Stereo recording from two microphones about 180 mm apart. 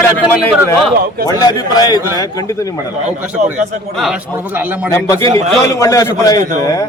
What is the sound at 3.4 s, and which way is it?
Speech, 45° right (ahead or behind).